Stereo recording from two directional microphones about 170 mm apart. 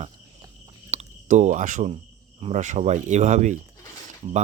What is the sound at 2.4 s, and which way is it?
Speech, 45° right (ahead or behind).